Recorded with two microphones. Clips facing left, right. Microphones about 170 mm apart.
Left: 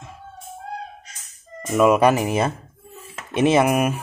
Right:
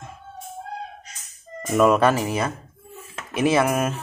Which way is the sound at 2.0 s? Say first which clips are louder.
Left 3 dB; 15° left (ahead or behind).